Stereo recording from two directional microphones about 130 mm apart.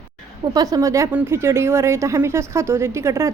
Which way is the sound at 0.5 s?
30° right (ahead or behind).